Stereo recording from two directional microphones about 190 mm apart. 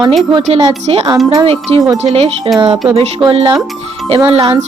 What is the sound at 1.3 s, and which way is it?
Music, 25° right (ahead or behind).